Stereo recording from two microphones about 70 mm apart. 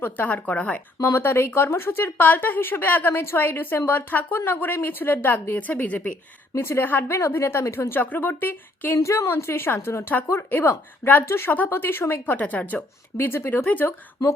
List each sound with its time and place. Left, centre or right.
0.0 s a woman's voice: left
1.0 s a woman's voice: left
6.5 s speech: left
7.2 s speech: left
9.0 s a woman's voice: left
13.1 s a woman's voice: left